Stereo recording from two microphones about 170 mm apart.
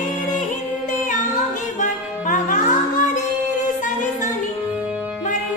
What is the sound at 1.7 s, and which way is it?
Music, 50° left (ahead or behind).